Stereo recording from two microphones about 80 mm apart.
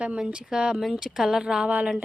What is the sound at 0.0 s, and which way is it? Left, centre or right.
A woman's voice, centre.